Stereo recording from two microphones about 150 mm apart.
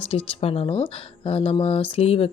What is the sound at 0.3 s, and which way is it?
Speech, 40° left (ahead or behind).